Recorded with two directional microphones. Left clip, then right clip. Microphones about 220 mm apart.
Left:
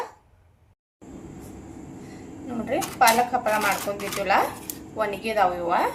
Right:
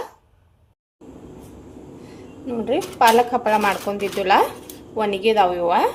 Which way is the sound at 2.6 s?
40° right (ahead or behind).